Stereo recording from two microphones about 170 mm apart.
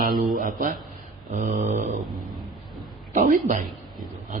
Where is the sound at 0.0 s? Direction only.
55° right (ahead or behind).